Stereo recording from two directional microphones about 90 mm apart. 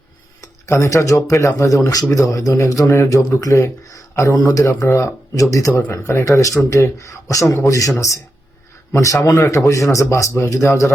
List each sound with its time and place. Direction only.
0.4 s speech: 35° left (ahead or behind)